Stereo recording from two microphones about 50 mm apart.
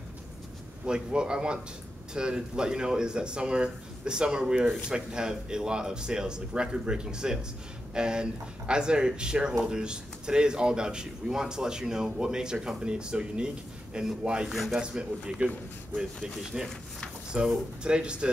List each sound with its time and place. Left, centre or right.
0.8 s speech: centre
14.5 s a man's voice: centre
14.8 s speech: centre
16.5 s speech: centre